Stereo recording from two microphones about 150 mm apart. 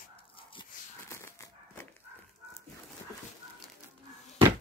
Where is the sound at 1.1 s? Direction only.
15° left (ahead or behind).